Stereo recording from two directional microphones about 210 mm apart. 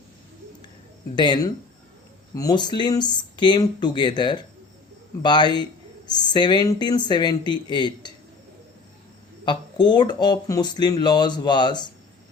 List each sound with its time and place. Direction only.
1.1 s speech: 20° left (ahead or behind)
9.4 s speech: 20° left (ahead or behind)